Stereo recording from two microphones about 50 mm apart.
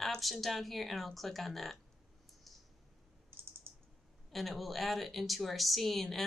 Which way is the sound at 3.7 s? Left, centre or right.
Right.